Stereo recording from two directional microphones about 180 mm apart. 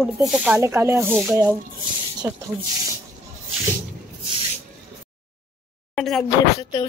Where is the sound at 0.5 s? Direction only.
15° right (ahead or behind).